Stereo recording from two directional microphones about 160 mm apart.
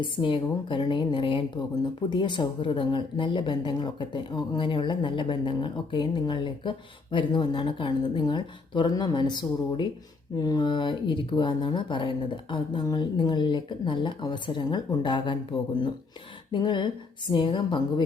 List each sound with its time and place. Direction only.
0.0 s a woman's voice: 30° left (ahead or behind)
16.5 s a woman's voice: 30° left (ahead or behind)